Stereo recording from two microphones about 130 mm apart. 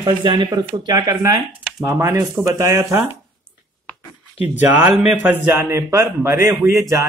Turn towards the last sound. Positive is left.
turn(degrees=-25)  # may be behind; listen again after turning